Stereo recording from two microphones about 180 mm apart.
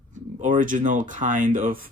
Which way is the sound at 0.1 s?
45° right (ahead or behind).